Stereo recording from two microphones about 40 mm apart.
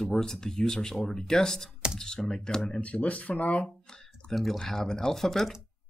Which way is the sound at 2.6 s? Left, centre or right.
Left.